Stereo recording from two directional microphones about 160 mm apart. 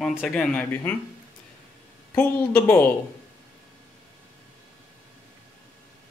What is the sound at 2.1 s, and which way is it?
Speech, 10° left (ahead or behind).